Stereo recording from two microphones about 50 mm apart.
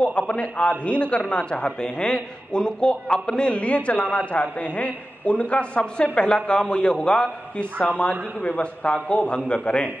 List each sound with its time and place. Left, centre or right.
0.3 s a man's voice: left
8.1 s a man's voice: left
8.8 s a man's voice: left